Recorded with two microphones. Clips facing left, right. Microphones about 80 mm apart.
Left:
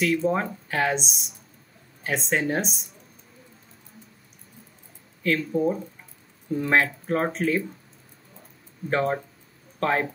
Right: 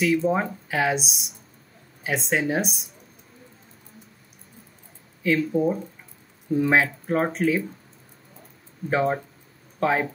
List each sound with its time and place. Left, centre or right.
0.0 s speech: centre
5.2 s speech: centre
8.9 s speech: centre